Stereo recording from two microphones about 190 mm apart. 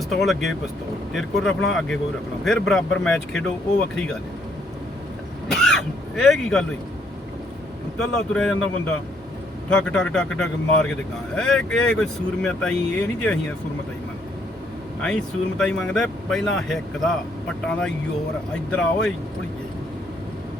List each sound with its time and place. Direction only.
0.1 s speech: centre (ahead or behind)
5.6 s speech: centre (ahead or behind)
7.9 s speech: 5° left (ahead or behind)
9.6 s speech: 5° left (ahead or behind)
15.0 s speech: 5° left (ahead or behind)